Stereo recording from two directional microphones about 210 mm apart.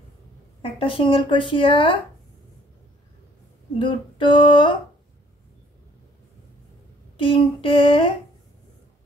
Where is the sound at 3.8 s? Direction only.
25° left (ahead or behind).